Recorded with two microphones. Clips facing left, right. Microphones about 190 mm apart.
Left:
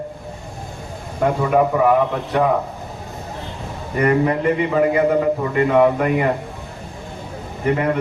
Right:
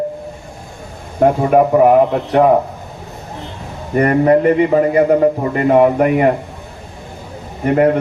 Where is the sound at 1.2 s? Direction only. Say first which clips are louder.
Right 5 dB; 45° right (ahead or behind).